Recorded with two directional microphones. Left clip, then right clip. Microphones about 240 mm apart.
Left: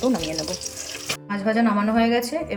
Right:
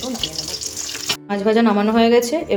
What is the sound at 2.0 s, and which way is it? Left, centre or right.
Speech, centre.